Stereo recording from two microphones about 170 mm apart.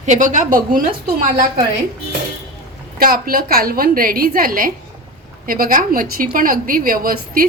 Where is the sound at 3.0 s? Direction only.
60° right (ahead or behind).